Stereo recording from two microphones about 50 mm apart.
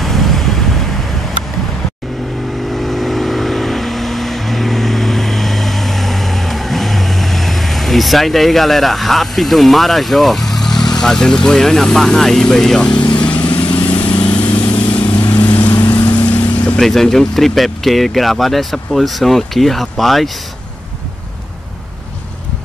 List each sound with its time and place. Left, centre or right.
0.0 s vehicle: centre
2.7 s vehicle: centre
13.5 s vehicle: left
16.3 s vehicle: left
16.8 s speech: centre